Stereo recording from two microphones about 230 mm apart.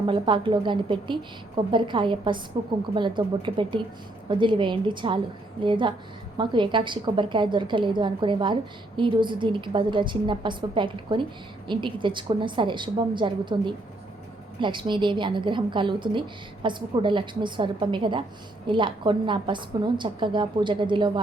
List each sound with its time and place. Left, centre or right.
0.1 s a woman's voice: right